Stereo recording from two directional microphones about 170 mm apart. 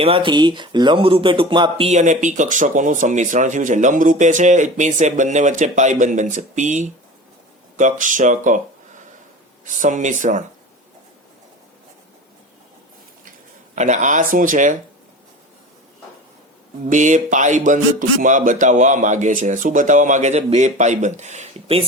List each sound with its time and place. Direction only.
0.0 s speech: 30° right (ahead or behind)
1.9 s speech: 45° right (ahead or behind)
9.6 s speech: 50° right (ahead or behind)
13.7 s speech: 45° right (ahead or behind)
16.9 s speech: 45° right (ahead or behind)